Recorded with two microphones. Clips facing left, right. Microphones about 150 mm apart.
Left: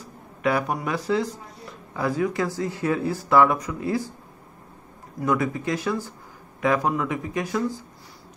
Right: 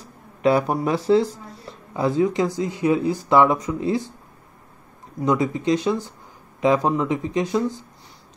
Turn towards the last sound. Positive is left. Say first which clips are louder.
# right 4 dB
turn(degrees=-20)  # may be behind; listen again after turning